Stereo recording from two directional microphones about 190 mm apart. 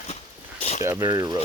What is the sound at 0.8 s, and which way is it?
Speech, 15° right (ahead or behind).